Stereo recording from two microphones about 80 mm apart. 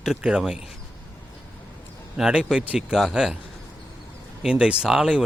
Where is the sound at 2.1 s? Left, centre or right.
Centre.